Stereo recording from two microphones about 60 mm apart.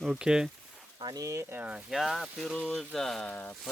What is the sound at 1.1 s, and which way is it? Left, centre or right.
Speech, right.